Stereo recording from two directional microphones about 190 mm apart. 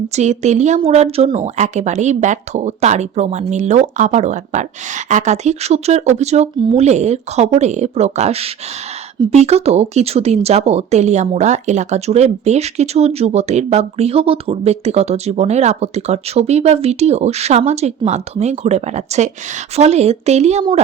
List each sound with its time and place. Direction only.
0.2 s speech: 35° right (ahead or behind)